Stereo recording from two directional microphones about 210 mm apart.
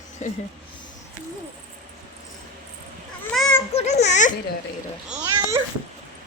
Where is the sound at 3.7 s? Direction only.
30° left (ahead or behind).